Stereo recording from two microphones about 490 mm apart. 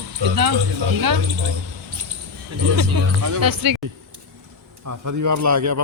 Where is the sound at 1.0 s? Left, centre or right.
Right.